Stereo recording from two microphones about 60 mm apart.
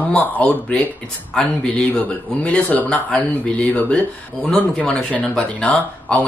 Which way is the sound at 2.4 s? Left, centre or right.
Left.